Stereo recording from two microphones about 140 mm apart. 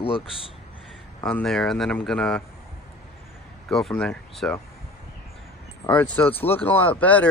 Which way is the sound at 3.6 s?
5° left (ahead or behind).